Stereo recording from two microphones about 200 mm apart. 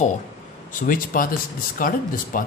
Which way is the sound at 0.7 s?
45° left (ahead or behind).